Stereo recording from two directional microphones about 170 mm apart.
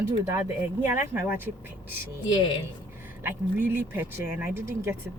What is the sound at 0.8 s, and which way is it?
Speech, 15° right (ahead or behind).